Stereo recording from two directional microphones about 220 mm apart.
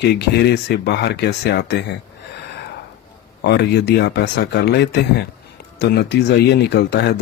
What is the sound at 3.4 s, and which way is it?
Speech, 50° left (ahead or behind).